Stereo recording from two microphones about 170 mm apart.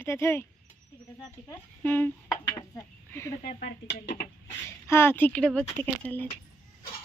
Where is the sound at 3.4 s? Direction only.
75° left (ahead or behind).